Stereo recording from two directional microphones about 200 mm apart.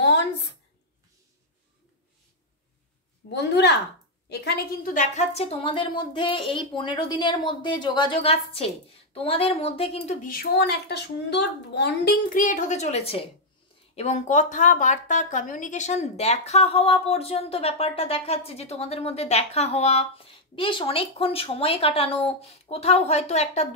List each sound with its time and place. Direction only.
0.0 s a sound: 60° left (ahead or behind)
3.3 s a woman's voice: 55° left (ahead or behind); by 10.1 s 30° left (ahead or behind)
10.2 s a woman's voice: 50° left (ahead or behind); by 23.7 s 35° left (ahead or behind)